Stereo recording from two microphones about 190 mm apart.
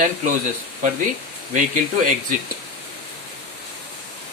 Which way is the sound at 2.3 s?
40° right (ahead or behind).